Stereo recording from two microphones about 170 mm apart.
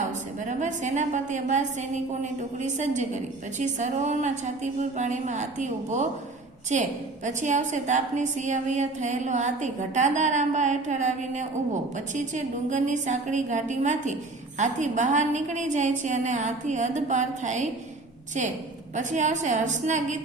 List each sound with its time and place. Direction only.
0.4 s a woman's voice: 45° right (ahead or behind)
18.9 s a woman's voice: 45° right (ahead or behind)